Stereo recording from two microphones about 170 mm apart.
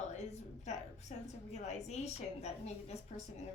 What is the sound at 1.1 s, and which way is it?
A woman's voice, 45° left (ahead or behind).